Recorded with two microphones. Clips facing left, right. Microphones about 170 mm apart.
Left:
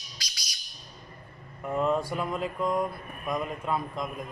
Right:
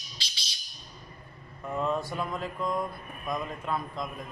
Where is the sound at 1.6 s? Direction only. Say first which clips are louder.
Left 3 dB; 20° left (ahead or behind).